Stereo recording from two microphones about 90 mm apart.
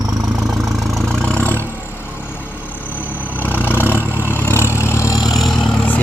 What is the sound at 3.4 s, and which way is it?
Vehicle, 20° left (ahead or behind).